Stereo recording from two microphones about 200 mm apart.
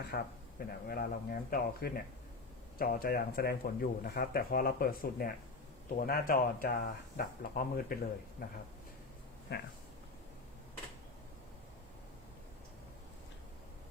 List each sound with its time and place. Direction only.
0.1 s speech: 40° left (ahead or behind)
9.5 s speech: 55° left (ahead or behind)